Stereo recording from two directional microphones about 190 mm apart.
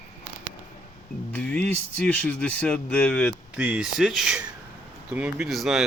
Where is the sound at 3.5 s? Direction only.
5° right (ahead or behind).